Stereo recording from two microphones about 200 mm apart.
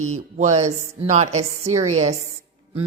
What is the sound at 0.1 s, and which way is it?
Speech, 35° right (ahead or behind).